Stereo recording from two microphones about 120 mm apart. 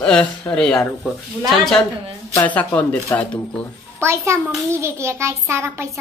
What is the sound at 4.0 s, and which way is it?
A child's voice, 20° right (ahead or behind).